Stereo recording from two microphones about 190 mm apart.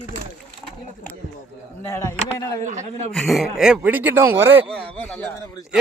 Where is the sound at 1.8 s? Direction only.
15° left (ahead or behind).